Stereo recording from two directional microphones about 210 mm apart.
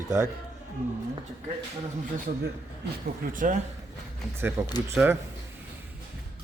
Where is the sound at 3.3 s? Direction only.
40° right (ahead or behind).